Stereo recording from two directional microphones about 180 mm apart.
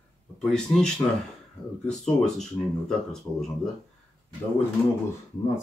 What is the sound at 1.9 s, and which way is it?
Speech, 5° left (ahead or behind).